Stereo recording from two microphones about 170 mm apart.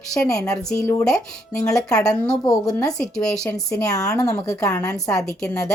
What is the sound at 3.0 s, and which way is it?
Speech, 5° left (ahead or behind).